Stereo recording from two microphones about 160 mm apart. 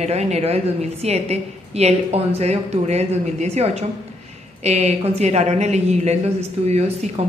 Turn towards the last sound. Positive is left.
turn(degrees=-40)  # may be behind; listen again after turning